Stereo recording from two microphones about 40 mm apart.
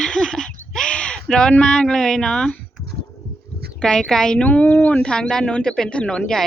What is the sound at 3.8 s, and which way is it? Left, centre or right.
Speech, centre.